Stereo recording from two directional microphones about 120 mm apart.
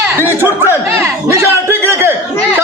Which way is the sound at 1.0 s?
25° right (ahead or behind).